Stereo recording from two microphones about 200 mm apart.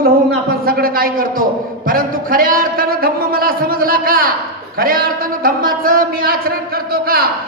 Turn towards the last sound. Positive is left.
turn(degrees=-50)  # may be behind; listen again after turning